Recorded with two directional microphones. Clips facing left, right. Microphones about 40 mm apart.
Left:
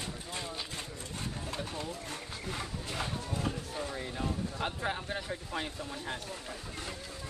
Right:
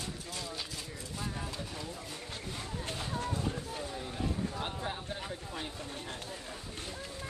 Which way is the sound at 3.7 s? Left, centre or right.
Left.